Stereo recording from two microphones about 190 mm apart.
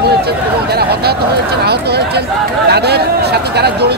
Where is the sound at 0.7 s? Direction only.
55° right (ahead or behind).